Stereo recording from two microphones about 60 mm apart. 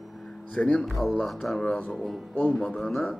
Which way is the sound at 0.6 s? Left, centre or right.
Centre.